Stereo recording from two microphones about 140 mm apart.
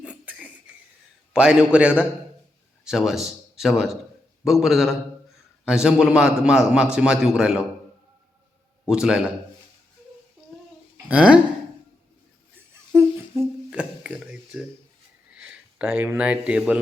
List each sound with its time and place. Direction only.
0.0 s a sound: 10° right (ahead or behind)
1.3 s a man's voice: 5° right (ahead or behind)
8.9 s a man's voice: 5° right (ahead or behind)
10.9 s a sound: 10° right (ahead or behind)
12.9 s humming: 15° right (ahead or behind)
13.7 s speech: 5° right (ahead or behind)